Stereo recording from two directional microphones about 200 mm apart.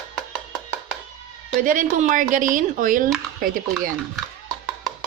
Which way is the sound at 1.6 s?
40° right (ahead or behind).